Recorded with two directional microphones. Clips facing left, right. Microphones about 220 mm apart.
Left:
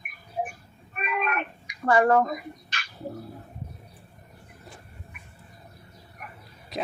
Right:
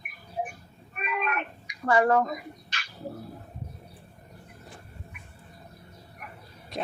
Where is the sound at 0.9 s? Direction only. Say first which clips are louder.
Left 2 dB; 55° left (ahead or behind).